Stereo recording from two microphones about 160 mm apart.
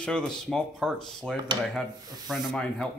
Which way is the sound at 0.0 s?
5° left (ahead or behind).